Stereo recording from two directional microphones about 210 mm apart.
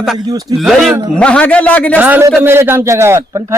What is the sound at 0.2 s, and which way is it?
Speech, 20° right (ahead or behind).